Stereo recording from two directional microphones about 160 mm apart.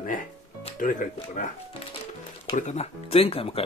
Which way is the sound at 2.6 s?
45° left (ahead or behind).